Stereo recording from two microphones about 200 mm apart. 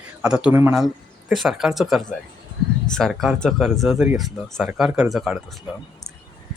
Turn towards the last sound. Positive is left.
turn(degrees=0)  # may be behind; listen again after turning